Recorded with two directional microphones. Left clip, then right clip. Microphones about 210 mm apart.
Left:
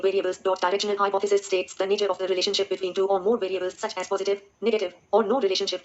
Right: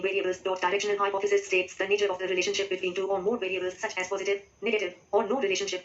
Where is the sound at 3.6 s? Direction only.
55° left (ahead or behind).